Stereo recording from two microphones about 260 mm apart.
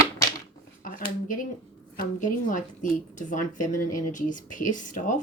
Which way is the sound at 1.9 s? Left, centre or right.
Left.